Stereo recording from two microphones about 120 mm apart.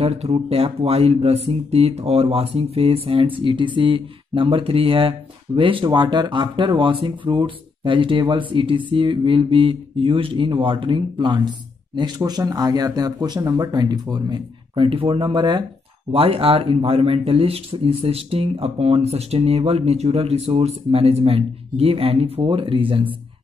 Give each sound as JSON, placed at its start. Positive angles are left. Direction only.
{"t": 0.0, "sound": "speech", "side_deg": -55}
{"t": 16.1, "sound": "speech", "side_deg": -50}